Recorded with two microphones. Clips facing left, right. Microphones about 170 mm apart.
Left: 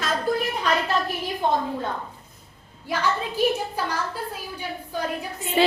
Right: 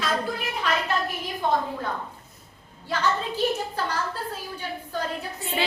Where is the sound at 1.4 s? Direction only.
25° left (ahead or behind).